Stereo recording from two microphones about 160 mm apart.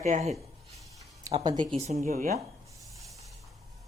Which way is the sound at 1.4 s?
30° right (ahead or behind).